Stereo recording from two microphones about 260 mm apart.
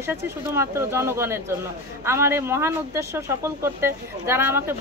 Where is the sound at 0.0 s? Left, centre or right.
Centre.